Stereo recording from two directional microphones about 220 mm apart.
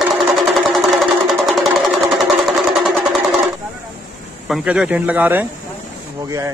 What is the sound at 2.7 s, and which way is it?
Music, centre (ahead or behind).